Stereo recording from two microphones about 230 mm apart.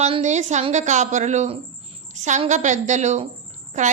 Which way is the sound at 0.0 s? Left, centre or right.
Right.